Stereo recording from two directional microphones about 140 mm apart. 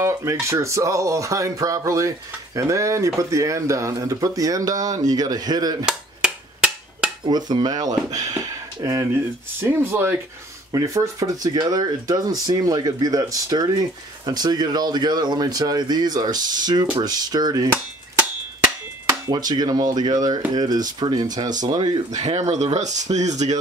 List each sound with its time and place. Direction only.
0.0 s speech: 20° right (ahead or behind)
5.9 s a sound: 5° right (ahead or behind)
7.2 s speech: 30° right (ahead or behind)
19.2 s speech: 30° right (ahead or behind)
22.1 s speech: 55° right (ahead or behind)